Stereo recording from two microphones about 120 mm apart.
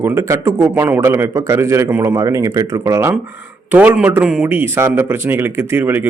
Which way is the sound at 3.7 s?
10° right (ahead or behind).